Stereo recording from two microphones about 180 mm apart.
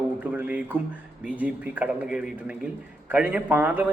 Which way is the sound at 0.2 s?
10° right (ahead or behind).